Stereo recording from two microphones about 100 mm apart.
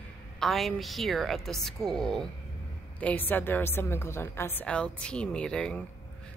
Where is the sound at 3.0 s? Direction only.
15° left (ahead or behind).